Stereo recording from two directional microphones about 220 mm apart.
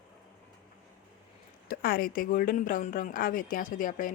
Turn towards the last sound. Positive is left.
turn(degrees=35)  # may be behind; listen again after turning